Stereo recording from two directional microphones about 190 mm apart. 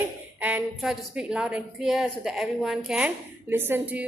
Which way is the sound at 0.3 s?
5° right (ahead or behind).